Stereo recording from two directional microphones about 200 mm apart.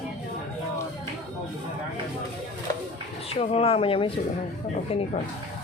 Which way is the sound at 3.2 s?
30° left (ahead or behind).